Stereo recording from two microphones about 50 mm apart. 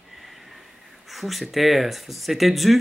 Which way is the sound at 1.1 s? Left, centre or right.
Centre.